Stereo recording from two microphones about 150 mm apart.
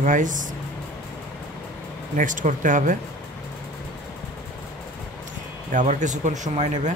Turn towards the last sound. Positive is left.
turn(degrees=-50)  # may be behind; listen again after turning